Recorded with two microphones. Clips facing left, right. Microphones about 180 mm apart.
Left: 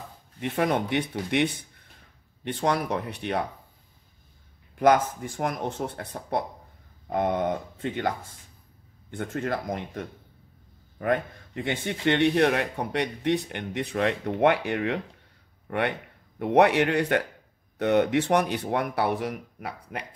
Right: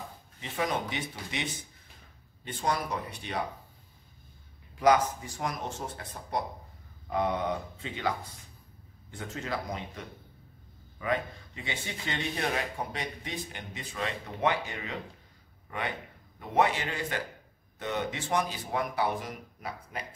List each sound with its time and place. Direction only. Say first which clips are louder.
0.4 s speech: left 7 dB; 60° left (ahead or behind)
4.7 s speech: left 3 dB; 55° left (ahead or behind)
7.1 s speech: left 4 dB; 50° left (ahead or behind)